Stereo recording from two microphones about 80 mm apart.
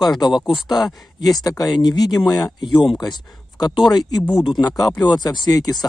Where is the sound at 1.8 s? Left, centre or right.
Left.